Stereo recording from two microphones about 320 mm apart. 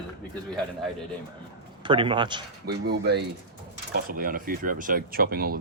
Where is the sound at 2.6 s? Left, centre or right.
Right.